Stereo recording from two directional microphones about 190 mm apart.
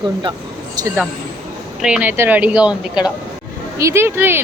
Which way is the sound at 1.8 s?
5° right (ahead or behind).